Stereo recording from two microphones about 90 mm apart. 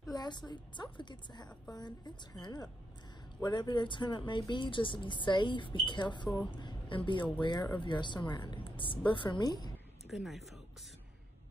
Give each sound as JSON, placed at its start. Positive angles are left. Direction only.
{"t": 0.0, "sound": "a woman's voice", "side_deg": 50}
{"t": 9.4, "sound": "a woman's voice", "side_deg": 45}
{"t": 10.0, "sound": "speech", "side_deg": 0}